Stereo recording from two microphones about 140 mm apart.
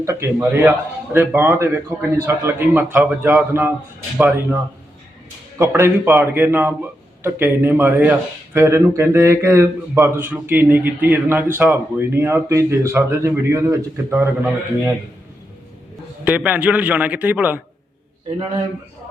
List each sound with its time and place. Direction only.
0.0 s a man's voice: 20° right (ahead or behind)
5.5 s a man's voice: 20° right (ahead or behind)
16.2 s speech: 10° right (ahead or behind)